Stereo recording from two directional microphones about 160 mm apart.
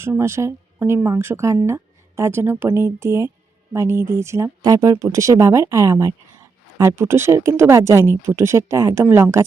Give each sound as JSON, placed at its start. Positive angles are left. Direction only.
{"t": 0.0, "sound": "speech", "side_deg": -15}